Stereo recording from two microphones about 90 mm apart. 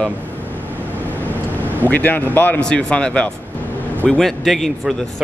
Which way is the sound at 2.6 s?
10° left (ahead or behind).